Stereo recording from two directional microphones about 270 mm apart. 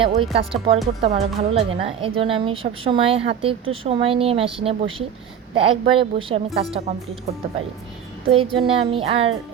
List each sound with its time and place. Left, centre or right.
0.0 s a woman's voice: right
8.3 s a woman's voice: right